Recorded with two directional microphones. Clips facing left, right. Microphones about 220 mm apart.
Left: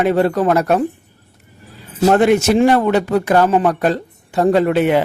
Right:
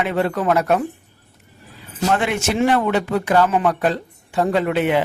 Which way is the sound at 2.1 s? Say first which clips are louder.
Left 8 dB; 40° left (ahead or behind).